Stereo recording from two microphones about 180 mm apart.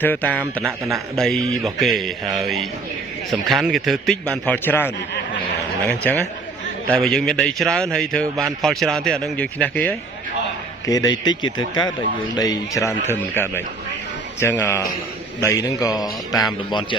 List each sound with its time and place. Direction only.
0.0 s a man's voice: 10° left (ahead or behind)
10.8 s a man's voice: 20° left (ahead or behind)